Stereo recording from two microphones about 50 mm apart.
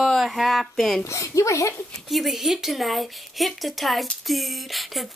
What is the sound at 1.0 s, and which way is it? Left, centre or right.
Speech, left.